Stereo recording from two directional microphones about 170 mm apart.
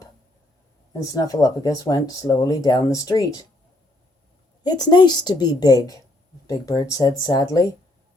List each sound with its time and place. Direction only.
0.9 s speech: 20° left (ahead or behind)
4.6 s speech: 25° left (ahead or behind)